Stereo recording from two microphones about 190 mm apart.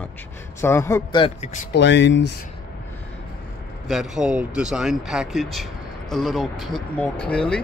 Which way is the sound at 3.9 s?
Centre (ahead or behind).